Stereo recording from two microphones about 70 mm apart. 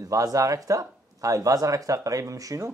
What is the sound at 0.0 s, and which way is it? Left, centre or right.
Speech, right.